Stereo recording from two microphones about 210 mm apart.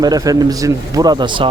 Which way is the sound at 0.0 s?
15° right (ahead or behind).